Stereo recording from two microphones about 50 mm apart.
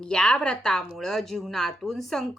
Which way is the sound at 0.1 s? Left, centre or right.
Centre.